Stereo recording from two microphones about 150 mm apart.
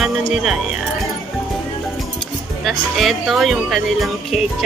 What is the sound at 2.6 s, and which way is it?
Speech, centre (ahead or behind).